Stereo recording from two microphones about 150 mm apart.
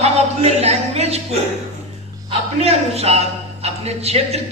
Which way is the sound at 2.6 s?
45° right (ahead or behind).